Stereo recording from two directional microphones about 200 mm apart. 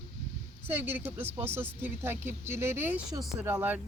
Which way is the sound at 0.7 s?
10° right (ahead or behind).